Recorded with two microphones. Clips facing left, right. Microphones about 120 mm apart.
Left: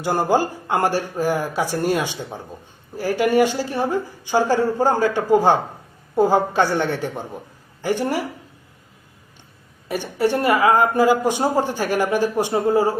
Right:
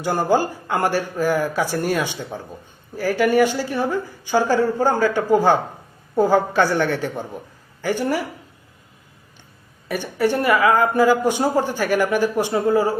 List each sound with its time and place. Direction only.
0.0 s a woman's voice: 25° left (ahead or behind)
9.9 s a woman's voice: 30° left (ahead or behind)